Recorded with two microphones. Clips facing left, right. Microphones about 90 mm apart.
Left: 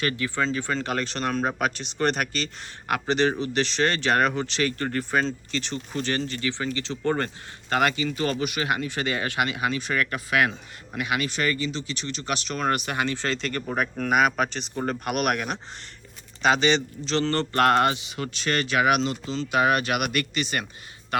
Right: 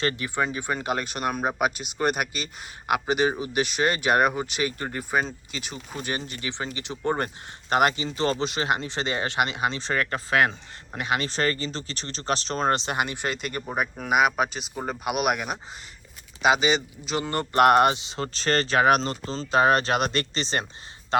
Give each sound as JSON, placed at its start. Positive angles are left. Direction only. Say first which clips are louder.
{"t": 0.0, "sound": "speech", "louder": "even", "side_deg": -25}